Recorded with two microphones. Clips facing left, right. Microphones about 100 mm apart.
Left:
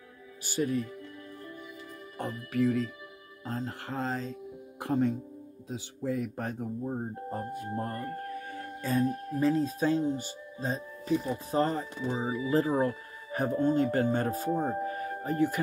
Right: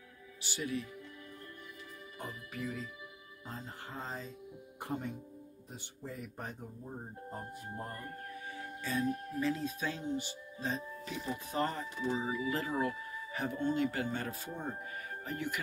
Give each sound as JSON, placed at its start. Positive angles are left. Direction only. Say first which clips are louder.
{"t": 0.4, "sound": "speech", "louder": "left 8 dB", "side_deg": 45}
{"t": 2.1, "sound": "speech", "louder": "left 13 dB", "side_deg": 75}
{"t": 3.4, "sound": "speech", "louder": "left 10 dB", "side_deg": 90}
{"t": 8.5, "sound": "speech", "louder": "left 5 dB", "side_deg": 45}